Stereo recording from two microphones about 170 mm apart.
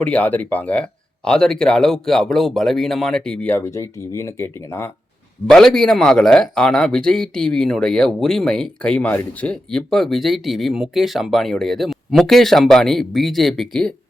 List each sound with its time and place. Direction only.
0.0 s speech: 10° left (ahead or behind)
5.5 s speech: 5° left (ahead or behind)